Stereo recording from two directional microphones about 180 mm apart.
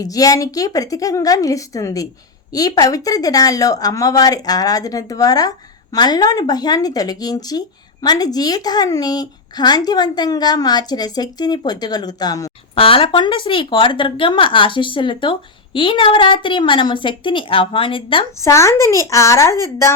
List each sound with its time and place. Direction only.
0.0 s speech: 20° left (ahead or behind)
18.3 s speech: 15° left (ahead or behind)